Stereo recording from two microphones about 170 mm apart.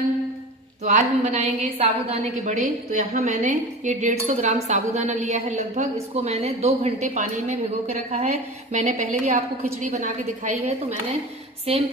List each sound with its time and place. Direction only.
0.8 s a woman's voice: 40° right (ahead or behind)